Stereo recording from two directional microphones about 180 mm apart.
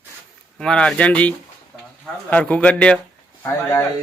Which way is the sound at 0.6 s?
5° left (ahead or behind).